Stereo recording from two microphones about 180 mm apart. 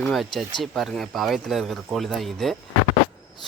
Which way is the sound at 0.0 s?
Centre (ahead or behind).